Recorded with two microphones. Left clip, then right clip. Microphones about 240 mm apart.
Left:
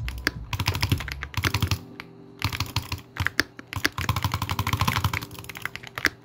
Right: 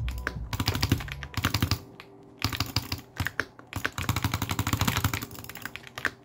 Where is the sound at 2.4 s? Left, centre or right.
Centre.